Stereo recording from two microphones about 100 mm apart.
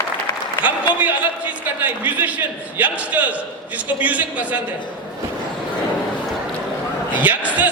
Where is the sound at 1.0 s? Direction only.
15° right (ahead or behind).